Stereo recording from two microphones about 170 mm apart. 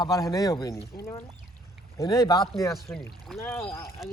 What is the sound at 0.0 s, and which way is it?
Speech, 20° left (ahead or behind).